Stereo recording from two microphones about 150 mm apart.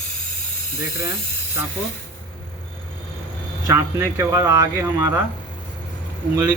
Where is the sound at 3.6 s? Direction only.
20° right (ahead or behind).